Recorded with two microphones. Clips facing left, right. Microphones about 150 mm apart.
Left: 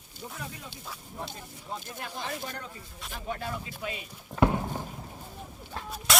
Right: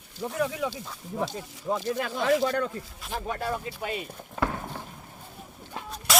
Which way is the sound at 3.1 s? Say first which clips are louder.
Right 5 dB; 60° right (ahead or behind).